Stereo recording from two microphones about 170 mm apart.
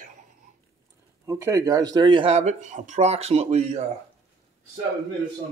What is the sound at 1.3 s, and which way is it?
Speech, 15° right (ahead or behind).